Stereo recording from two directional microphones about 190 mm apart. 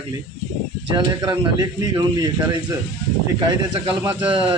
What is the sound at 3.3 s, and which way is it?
Speech, 25° right (ahead or behind).